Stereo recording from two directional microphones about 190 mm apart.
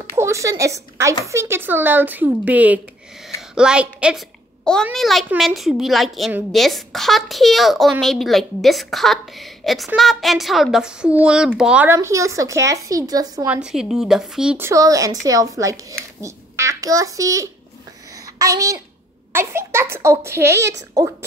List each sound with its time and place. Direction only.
0.1 s a woman's voice: 15° right (ahead or behind)
13.5 s a woman's voice: 5° right (ahead or behind)
14.7 s a woman's voice: 15° right (ahead or behind)